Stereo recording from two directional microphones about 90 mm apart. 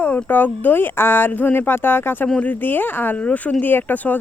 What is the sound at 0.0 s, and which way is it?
Speech, 20° left (ahead or behind).